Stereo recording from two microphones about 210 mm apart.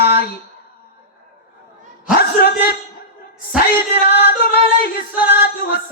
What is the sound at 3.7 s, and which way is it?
Music, 50° left (ahead or behind).